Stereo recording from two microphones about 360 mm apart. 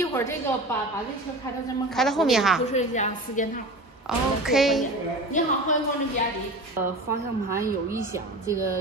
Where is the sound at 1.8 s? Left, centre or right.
Centre.